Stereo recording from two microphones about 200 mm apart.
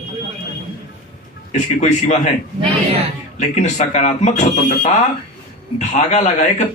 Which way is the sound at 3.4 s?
35° left (ahead or behind).